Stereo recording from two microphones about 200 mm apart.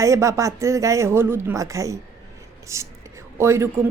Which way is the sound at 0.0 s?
15° right (ahead or behind).